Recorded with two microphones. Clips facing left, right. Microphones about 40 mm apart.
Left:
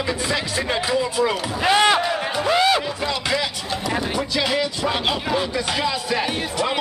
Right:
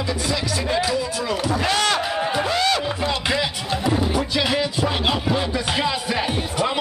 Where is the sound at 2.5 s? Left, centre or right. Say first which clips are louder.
Left 6 dB; centre.